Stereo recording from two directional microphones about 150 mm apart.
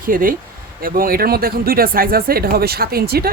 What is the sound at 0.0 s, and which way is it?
Speech, 70° right (ahead or behind).